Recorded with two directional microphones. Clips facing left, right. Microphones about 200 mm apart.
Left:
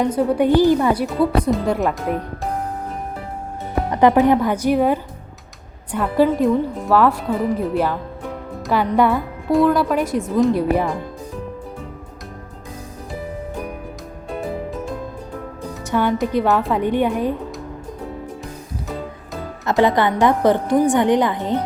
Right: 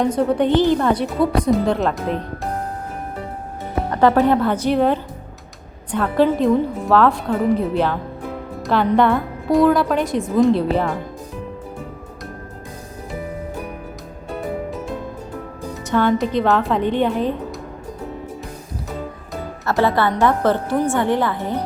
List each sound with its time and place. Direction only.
0.0 s a woman's voice: 5° left (ahead or behind)
3.8 s a woman's voice: 15° left (ahead or behind)
15.7 s music: 10° left (ahead or behind)
16.2 s a woman's voice: 10° left (ahead or behind)
19.6 s a woman's voice: 15° left (ahead or behind)